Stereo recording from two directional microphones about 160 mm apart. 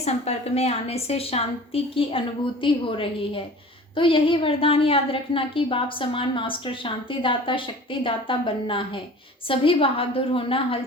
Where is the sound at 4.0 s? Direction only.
35° left (ahead or behind).